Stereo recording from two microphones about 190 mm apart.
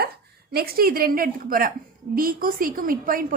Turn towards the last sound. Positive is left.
turn(degrees=-50)  # may be behind; listen again after turning